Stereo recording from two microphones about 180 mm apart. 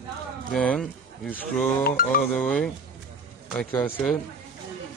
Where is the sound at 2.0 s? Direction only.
50° left (ahead or behind).